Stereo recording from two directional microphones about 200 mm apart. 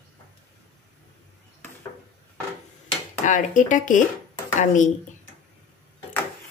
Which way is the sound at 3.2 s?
40° left (ahead or behind).